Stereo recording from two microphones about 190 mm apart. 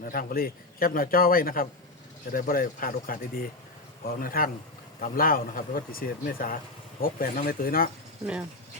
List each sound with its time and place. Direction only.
0.0 s a man's voice: 50° left (ahead or behind)